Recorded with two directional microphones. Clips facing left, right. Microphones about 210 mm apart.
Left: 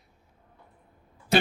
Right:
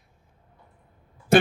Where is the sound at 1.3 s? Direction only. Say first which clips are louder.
Right 5 dB; 50° right (ahead or behind).